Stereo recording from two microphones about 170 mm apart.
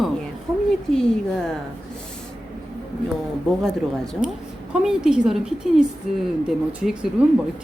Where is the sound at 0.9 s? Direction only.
5° left (ahead or behind).